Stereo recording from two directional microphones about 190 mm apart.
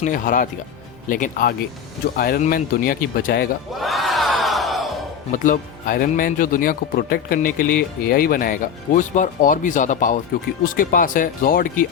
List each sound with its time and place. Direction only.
0.0 s speech: 45° left (ahead or behind)
3.8 s crowd: centre (ahead or behind)
5.3 s speech: 45° left (ahead or behind)